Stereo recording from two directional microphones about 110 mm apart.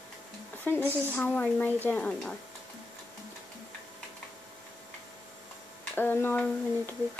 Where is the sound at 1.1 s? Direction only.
15° left (ahead or behind).